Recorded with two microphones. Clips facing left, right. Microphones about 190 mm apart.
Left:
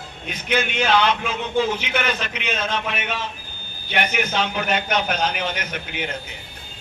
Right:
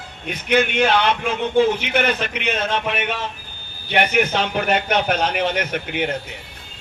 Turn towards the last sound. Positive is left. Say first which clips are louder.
# right 6 dB
turn(degrees=-60)  # may be behind; listen again after turning